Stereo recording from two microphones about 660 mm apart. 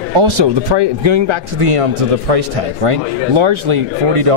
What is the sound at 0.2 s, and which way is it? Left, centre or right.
A man's voice, right.